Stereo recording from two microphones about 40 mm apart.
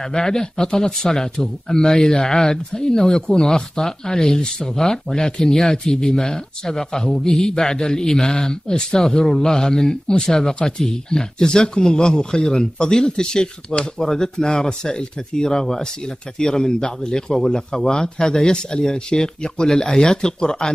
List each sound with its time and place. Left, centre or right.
0.1 s speech: centre
17.7 s speech: left